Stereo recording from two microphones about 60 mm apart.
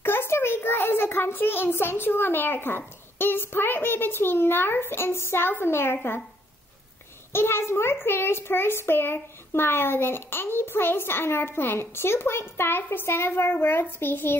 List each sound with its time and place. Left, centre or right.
0.0 s a child's voice: left
7.3 s a child's voice: left